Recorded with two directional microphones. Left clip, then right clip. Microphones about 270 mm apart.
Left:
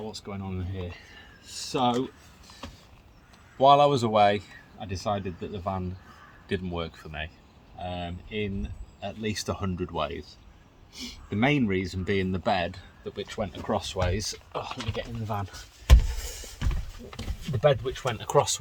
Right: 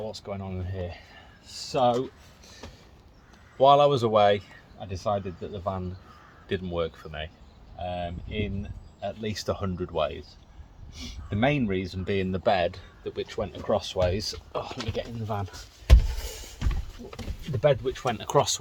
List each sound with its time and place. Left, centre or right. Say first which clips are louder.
0.1 s speech: right 2 dB; right
3.6 s speech: even; centre
16.0 s power windows: even; centre
17.6 s speech: even; centre